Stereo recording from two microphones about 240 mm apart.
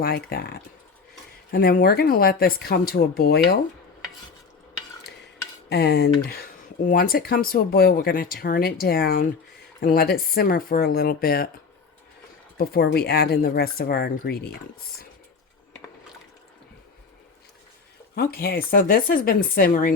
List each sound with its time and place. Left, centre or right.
0.0 s speech: left
5.6 s speech: left
12.5 s speech: left
18.1 s speech: left